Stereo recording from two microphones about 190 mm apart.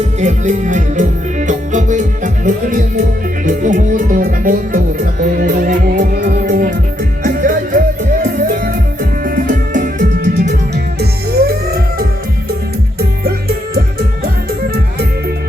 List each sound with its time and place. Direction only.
0.2 s music: 40° right (ahead or behind)
11.3 s music: 55° right (ahead or behind)